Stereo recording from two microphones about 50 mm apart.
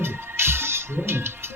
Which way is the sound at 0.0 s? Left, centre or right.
Right.